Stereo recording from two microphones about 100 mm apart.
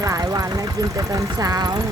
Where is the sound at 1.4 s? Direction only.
40° right (ahead or behind).